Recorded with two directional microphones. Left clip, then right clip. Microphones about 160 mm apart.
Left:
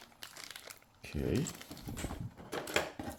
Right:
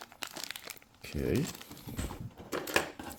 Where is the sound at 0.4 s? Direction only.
30° right (ahead or behind).